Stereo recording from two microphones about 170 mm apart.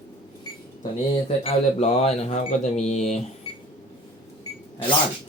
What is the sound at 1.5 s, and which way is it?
Speech, 40° left (ahead or behind).